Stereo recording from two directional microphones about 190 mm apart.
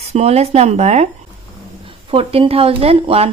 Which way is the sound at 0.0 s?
35° right (ahead or behind).